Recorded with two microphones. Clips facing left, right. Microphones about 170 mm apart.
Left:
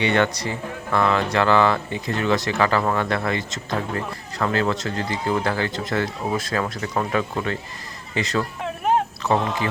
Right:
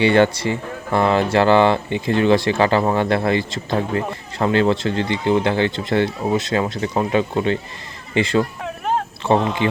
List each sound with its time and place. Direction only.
0.0 s speech: 30° right (ahead or behind)